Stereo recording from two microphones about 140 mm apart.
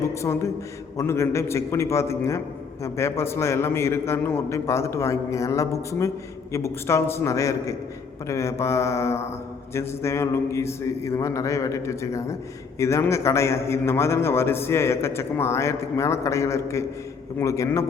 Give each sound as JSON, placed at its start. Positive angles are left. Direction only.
{"t": 0.0, "sound": "a man's voice", "side_deg": 20}